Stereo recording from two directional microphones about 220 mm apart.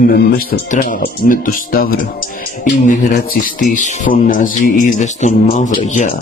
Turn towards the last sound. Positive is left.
turn(degrees=35)  # may be behind; listen again after turning